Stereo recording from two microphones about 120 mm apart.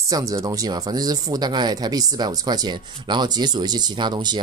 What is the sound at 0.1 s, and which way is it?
Speech, 30° right (ahead or behind).